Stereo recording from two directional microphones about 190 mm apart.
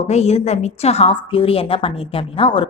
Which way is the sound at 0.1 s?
35° left (ahead or behind).